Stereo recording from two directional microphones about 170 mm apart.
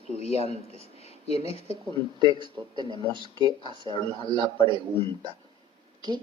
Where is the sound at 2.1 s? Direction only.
25° right (ahead or behind).